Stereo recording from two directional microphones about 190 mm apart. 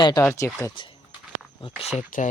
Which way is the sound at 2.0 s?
40° left (ahead or behind).